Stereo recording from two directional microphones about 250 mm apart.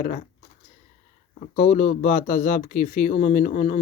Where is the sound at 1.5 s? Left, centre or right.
Left.